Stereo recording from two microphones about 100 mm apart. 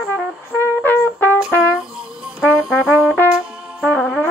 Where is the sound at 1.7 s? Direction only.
5° right (ahead or behind).